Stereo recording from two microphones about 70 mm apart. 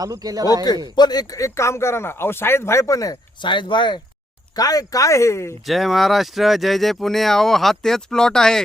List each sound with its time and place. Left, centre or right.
0.0 s a man's voice: right
0.9 s speech: left
4.5 s speech: left
5.6 s speech: centre